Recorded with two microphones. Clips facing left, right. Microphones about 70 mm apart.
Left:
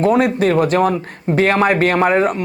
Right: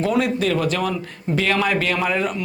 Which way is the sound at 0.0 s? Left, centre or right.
Left.